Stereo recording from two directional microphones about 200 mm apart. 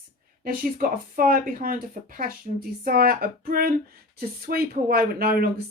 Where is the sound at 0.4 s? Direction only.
45° right (ahead or behind).